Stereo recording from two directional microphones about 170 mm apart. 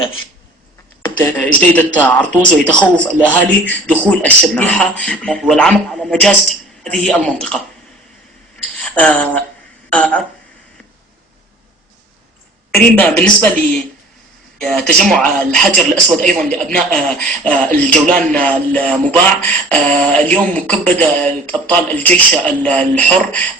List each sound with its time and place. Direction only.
1.0 s speech: 10° left (ahead or behind)
8.8 s speech: 10° left (ahead or behind)
12.7 s speech: 10° left (ahead or behind)
14.6 s speech: 5° left (ahead or behind)
17.7 s a man's voice: 50° right (ahead or behind)
18.2 s speech: 10° left (ahead or behind)